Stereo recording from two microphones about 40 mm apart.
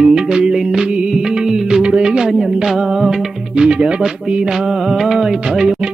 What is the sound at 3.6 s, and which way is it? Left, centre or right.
Music, right.